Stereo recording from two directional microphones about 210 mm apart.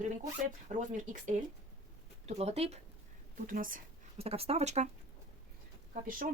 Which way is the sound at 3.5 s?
40° right (ahead or behind).